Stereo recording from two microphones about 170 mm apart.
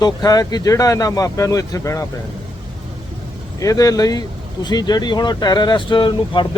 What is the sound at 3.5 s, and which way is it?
Speech, 20° left (ahead or behind).